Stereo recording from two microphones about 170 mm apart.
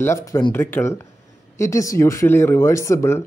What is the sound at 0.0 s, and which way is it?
Speech, 15° left (ahead or behind).